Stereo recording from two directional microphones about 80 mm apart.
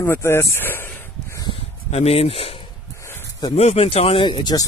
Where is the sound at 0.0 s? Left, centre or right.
Left.